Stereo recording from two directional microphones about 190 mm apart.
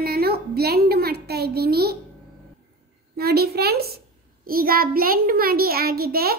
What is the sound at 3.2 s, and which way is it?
A woman's voice, 55° right (ahead or behind).